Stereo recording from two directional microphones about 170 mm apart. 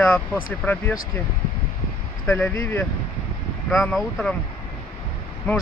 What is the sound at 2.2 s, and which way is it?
Speech, 10° left (ahead or behind).